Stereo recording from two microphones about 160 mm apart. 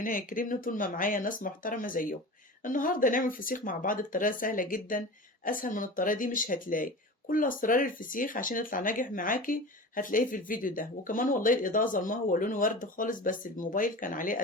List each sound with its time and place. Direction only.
0.0 s speech: 60° left (ahead or behind)